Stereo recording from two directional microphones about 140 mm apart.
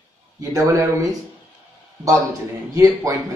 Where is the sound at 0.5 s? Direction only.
25° right (ahead or behind).